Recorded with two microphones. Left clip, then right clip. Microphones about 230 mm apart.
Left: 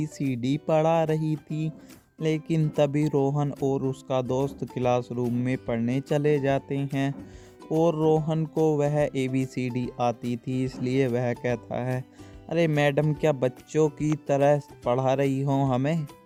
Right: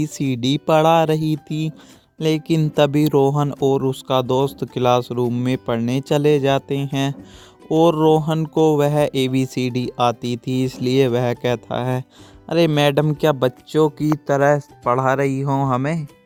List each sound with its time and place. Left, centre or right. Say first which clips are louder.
0.0 s speech: right 8 dB; right; by 16.0 s centre